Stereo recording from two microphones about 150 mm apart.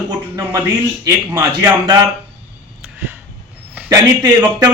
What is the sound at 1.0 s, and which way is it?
Speech, 25° right (ahead or behind).